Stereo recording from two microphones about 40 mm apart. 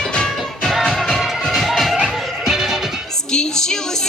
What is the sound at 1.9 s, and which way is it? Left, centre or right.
Music, centre.